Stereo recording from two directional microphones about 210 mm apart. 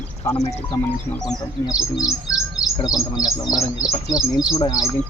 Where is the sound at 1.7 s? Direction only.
5° right (ahead or behind).